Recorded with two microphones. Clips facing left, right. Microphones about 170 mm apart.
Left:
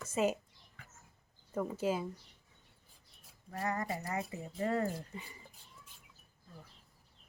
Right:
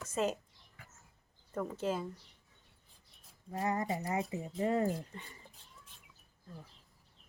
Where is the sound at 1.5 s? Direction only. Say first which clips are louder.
Left 1 dB; 5° left (ahead or behind).